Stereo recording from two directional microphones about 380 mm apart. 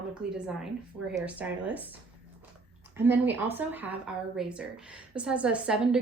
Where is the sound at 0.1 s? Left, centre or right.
Centre.